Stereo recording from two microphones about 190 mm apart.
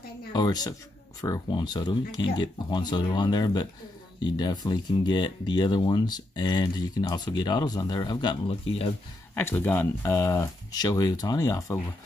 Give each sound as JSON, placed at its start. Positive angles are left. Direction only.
{"t": 0.3, "sound": "speech", "side_deg": 20}
{"t": 9.3, "sound": "speech", "side_deg": 10}